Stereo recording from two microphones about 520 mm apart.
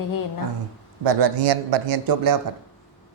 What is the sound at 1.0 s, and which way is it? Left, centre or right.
A man's voice, right.